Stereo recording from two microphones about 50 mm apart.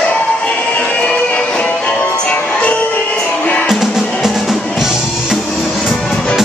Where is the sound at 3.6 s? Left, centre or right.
Centre.